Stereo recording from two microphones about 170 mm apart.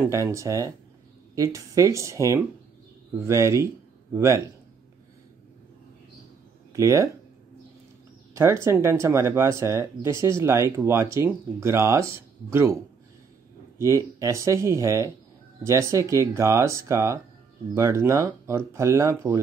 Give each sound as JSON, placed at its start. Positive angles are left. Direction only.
{"t": 0.0, "sound": "speech", "side_deg": -15}
{"t": 6.7, "sound": "speech", "side_deg": -15}
{"t": 8.4, "sound": "speech", "side_deg": -15}
{"t": 13.7, "sound": "speech", "side_deg": -15}